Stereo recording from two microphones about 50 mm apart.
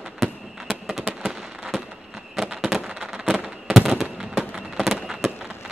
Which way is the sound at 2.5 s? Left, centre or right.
Centre.